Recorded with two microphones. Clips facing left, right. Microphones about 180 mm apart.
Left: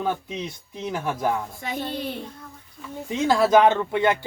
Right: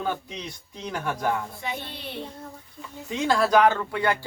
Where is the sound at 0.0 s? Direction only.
20° left (ahead or behind).